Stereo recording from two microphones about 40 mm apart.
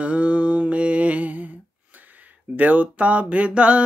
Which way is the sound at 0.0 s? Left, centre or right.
Right.